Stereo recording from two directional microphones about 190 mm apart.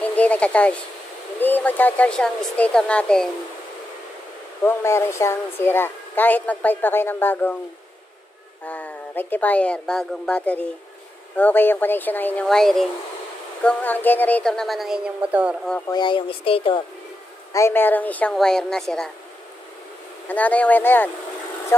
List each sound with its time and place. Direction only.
0.0 s speech: 10° left (ahead or behind)
4.6 s speech: 15° left (ahead or behind)
8.6 s speech: 10° left (ahead or behind)
15.9 s speech: 25° left (ahead or behind)
17.5 s speech: 15° left (ahead or behind)
20.2 s speech: 10° left (ahead or behind)